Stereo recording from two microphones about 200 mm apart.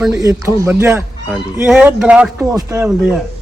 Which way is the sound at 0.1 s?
15° right (ahead or behind).